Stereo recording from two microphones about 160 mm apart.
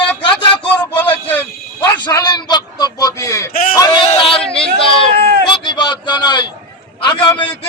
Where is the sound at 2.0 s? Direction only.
25° left (ahead or behind).